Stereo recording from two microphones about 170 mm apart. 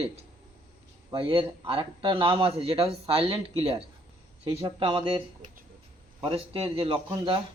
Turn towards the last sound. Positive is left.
turn(degrees=-30)  # may be behind; listen again after turning